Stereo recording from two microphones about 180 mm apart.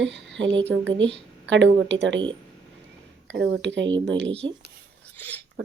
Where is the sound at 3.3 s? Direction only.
85° right.